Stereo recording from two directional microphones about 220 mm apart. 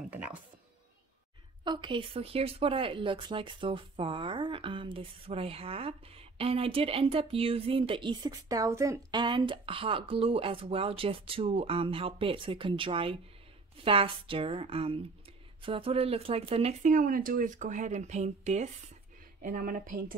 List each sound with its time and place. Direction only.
0.1 s speech: 5° right (ahead or behind)
1.6 s speech: 20° right (ahead or behind); by 20.2 s 40° right (ahead or behind)